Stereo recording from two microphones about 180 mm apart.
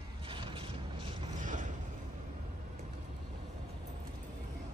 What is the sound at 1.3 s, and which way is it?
Mechanisms, 45° right (ahead or behind).